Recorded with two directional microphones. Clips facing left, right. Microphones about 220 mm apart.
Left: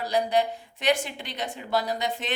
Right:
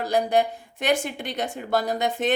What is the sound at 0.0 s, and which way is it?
A woman's voice, 50° right (ahead or behind).